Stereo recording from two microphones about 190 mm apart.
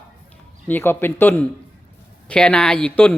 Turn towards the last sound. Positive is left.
turn(degrees=10)  # may be behind; listen again after turning